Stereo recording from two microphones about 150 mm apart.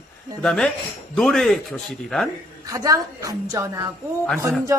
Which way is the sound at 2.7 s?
20° right (ahead or behind).